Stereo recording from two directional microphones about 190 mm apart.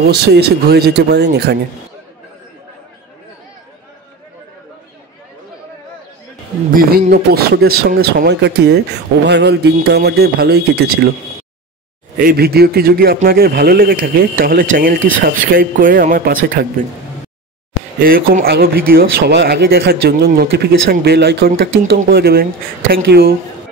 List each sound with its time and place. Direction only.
0.0 s speech: 60° right (ahead or behind)
6.7 s speech: 50° right (ahead or behind)
12.2 s a man's voice: 50° right (ahead or behind)
18.0 s speech: 50° right (ahead or behind)